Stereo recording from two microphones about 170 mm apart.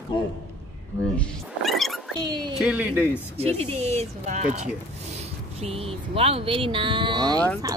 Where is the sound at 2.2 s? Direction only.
25° right (ahead or behind).